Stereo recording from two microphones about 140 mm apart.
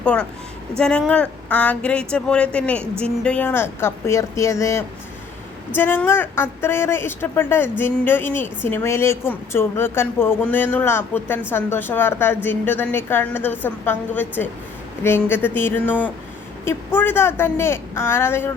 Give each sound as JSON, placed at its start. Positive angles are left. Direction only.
{"t": 0.0, "sound": "a woman's voice", "side_deg": 10}